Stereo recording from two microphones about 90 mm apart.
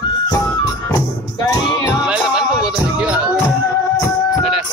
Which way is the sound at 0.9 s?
40° left (ahead or behind).